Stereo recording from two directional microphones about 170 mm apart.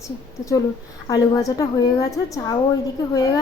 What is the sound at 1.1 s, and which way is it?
Speech, 20° left (ahead or behind).